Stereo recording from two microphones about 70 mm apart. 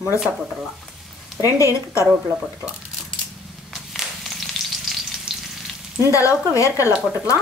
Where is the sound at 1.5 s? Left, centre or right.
Left.